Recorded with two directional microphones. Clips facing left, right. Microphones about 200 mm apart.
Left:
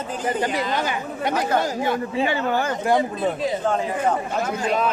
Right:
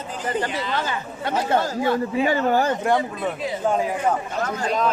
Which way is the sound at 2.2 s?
40° right (ahead or behind).